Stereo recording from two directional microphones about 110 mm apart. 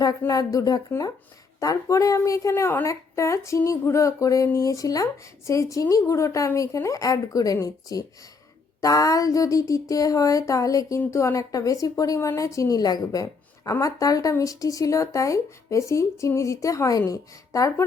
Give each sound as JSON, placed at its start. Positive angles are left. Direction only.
{"t": 0.3, "sound": "a woman's voice", "side_deg": 30}